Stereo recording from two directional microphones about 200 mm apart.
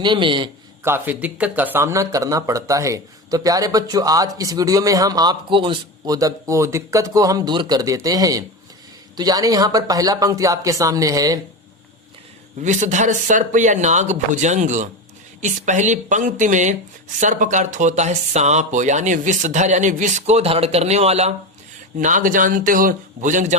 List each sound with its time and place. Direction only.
0.0 s a man's voice: 25° right (ahead or behind)
0.9 s speech: 10° right (ahead or behind)
12.6 s speech: 40° right (ahead or behind)